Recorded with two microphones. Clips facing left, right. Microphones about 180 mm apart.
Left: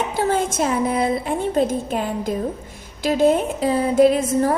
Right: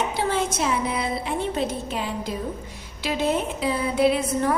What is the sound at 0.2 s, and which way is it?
Speech, 45° left (ahead or behind).